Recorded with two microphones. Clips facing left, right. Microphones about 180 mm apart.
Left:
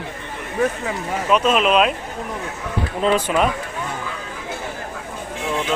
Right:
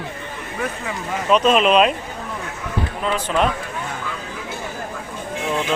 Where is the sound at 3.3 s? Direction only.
5° left (ahead or behind).